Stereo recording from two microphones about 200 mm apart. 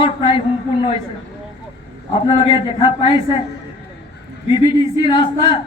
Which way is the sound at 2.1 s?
25° left (ahead or behind).